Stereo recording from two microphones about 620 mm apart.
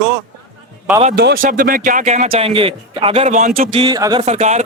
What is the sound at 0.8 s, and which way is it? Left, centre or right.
Speech, centre.